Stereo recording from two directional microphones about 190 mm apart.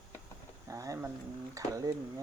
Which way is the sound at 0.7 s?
15° right (ahead or behind).